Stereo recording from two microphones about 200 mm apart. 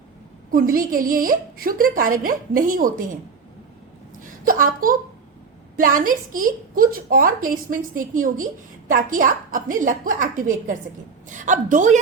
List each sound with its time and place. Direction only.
0.5 s a woman's voice: 45° right (ahead or behind)
4.2 s a woman's voice: 40° right (ahead or behind)